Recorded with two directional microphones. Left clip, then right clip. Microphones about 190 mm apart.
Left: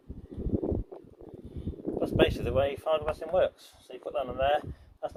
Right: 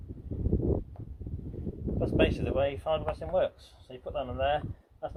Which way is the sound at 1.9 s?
25° left (ahead or behind).